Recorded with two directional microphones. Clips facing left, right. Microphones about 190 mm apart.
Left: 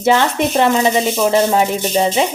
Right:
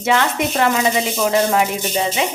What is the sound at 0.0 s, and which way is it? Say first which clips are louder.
Speech: left 4 dB; 30° left (ahead or behind).